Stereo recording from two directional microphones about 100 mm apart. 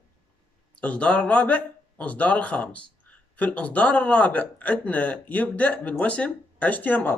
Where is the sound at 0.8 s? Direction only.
15° left (ahead or behind).